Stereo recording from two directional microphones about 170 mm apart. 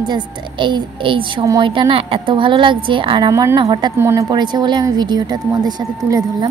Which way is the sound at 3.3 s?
15° right (ahead or behind).